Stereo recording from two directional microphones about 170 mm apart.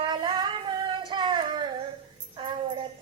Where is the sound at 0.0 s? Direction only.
25° right (ahead or behind).